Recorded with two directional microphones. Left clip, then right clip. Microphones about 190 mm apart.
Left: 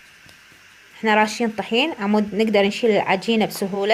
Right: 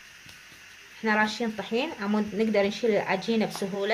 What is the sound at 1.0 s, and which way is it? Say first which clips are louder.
Speech: left 7 dB; 45° left (ahead or behind).